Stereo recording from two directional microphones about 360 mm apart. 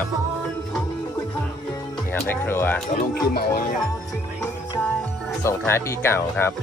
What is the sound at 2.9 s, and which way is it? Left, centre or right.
Speech, left.